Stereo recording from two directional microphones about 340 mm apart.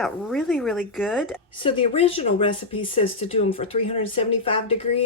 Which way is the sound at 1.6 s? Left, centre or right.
Centre.